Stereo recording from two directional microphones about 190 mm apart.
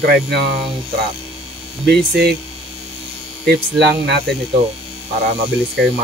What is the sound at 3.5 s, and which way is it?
Speech, 60° right (ahead or behind).